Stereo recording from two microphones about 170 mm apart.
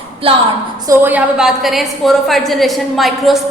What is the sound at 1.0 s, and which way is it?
A woman's voice, 10° right (ahead or behind).